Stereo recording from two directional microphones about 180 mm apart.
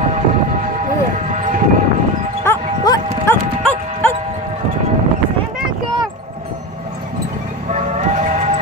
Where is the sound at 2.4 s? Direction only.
15° left (ahead or behind).